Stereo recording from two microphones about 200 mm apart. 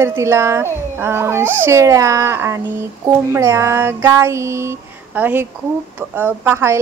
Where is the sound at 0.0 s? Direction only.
15° right (ahead or behind).